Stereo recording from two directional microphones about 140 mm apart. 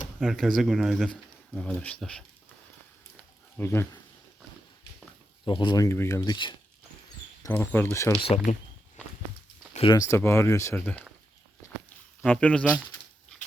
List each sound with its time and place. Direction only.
0.2 s speech: centre (ahead or behind)
3.6 s speech: 15° left (ahead or behind)
5.5 s speech: 35° left (ahead or behind)
5.8 s speech: 20° left (ahead or behind)
6.3 s speech: 35° left (ahead or behind)
7.5 s speech: 15° left (ahead or behind)
8.5 s speech: 60° left (ahead or behind)
9.8 s speech: 25° left (ahead or behind)
12.2 s speech: 10° left (ahead or behind)